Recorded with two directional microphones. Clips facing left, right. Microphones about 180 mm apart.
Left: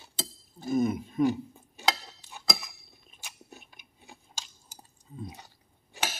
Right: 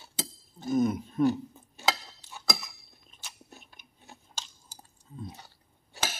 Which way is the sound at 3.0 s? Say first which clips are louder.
Left 1 dB; 10° left (ahead or behind).